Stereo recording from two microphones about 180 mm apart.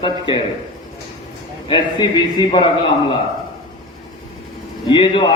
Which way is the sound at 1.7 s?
25° left (ahead or behind).